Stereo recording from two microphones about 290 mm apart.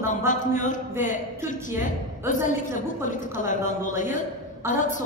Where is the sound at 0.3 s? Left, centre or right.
Left.